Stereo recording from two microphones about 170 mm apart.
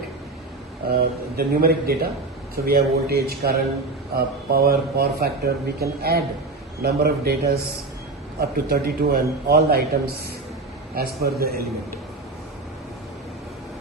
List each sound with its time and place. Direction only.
0.9 s a man's voice: 65° right (ahead or behind)